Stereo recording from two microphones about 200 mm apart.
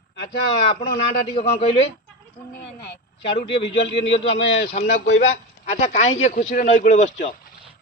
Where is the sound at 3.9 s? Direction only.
25° left (ahead or behind).